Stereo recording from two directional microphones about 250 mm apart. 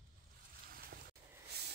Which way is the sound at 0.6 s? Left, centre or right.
Right.